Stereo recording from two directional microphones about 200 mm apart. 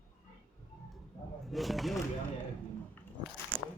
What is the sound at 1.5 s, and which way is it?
Speech, centre (ahead or behind).